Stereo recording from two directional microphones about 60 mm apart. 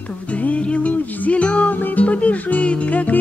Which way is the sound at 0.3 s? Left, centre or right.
Left.